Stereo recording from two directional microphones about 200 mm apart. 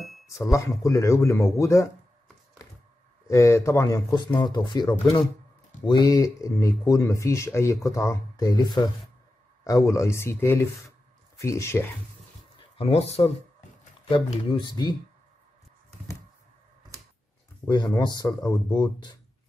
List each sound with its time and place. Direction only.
0.5 s speech: 15° left (ahead or behind)
3.3 s speech: 15° left (ahead or behind)
12.5 s speech: 30° left (ahead or behind)
17.6 s speech: 20° left (ahead or behind)